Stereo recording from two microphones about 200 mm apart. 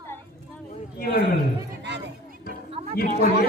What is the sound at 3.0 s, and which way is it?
Chatter, 50° left (ahead or behind).